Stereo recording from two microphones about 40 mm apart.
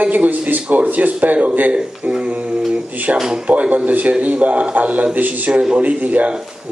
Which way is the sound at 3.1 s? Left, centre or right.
Right.